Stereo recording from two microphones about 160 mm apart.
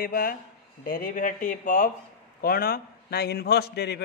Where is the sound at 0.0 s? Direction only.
65° left (ahead or behind).